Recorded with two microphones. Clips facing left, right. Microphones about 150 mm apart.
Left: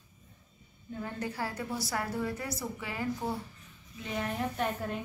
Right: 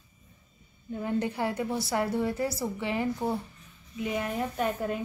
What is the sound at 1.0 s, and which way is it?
A woman's voice, 20° right (ahead or behind).